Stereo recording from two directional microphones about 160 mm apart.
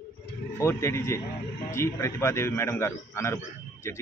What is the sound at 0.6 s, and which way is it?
A man's voice, 15° left (ahead or behind).